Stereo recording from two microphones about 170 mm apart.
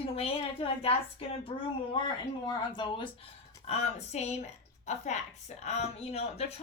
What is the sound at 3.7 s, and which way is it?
A woman's voice, 40° left (ahead or behind).